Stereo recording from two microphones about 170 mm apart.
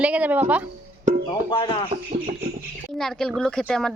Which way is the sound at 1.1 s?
45° right (ahead or behind).